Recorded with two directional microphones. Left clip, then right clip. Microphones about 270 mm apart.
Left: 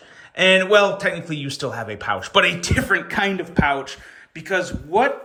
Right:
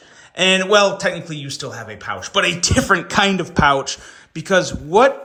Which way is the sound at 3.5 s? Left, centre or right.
Centre.